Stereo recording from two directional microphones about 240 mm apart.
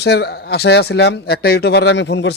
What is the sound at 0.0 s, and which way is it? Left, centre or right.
Speech, left.